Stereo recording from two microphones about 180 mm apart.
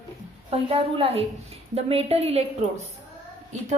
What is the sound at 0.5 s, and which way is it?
A woman's voice, 30° right (ahead or behind).